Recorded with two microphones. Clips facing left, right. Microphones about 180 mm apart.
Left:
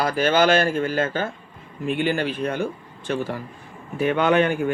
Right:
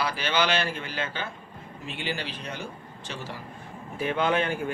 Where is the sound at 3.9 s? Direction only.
65° left (ahead or behind).